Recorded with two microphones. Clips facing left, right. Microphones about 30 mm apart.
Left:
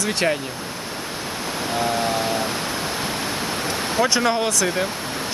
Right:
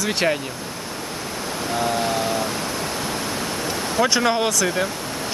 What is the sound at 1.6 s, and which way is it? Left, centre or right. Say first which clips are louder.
Waves: even; centre.